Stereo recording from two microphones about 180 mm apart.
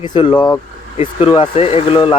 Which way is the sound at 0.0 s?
25° left (ahead or behind).